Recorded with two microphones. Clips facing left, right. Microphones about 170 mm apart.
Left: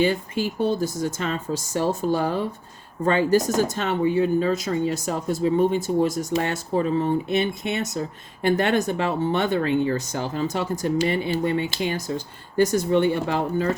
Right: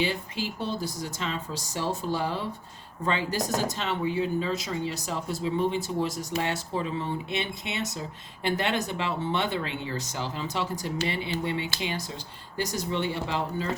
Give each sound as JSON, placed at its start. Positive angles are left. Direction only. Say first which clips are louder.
{"t": 0.0, "sound": "speech", "louder": "left 7 dB", "side_deg": 50}